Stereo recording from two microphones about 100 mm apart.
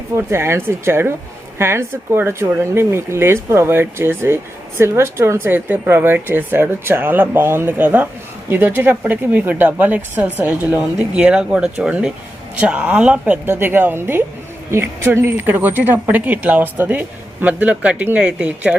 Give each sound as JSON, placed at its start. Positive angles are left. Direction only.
{"t": 0.2, "sound": "a woman's voice", "side_deg": -25}